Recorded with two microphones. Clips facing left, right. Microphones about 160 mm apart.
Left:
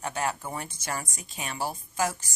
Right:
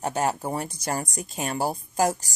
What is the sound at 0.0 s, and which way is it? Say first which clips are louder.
Speech: right 5 dB; 40° right (ahead or behind).